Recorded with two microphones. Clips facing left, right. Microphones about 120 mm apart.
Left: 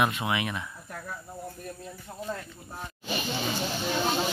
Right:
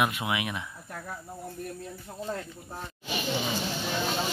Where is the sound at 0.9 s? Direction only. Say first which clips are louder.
Right 1 dB; 35° right (ahead or behind).